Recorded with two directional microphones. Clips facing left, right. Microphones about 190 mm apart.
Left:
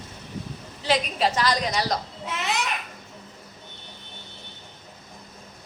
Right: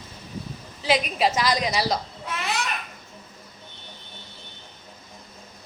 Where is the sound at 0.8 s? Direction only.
10° right (ahead or behind).